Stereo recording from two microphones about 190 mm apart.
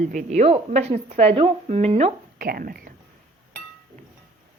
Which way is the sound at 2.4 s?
50° right (ahead or behind).